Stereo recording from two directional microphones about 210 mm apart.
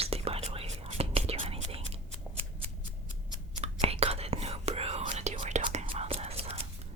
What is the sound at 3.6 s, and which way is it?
Whispering, 30° right (ahead or behind).